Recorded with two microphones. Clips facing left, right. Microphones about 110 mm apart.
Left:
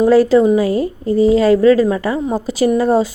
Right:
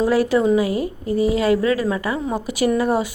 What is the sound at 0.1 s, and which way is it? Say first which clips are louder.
A woman's voice: left 6 dB; 30° left (ahead or behind).